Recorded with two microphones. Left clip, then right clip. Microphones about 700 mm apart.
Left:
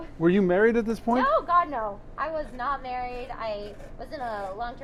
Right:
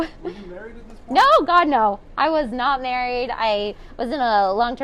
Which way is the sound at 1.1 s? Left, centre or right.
Right.